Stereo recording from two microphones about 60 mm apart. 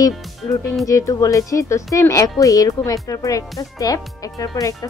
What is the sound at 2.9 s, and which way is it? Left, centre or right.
Speech, left.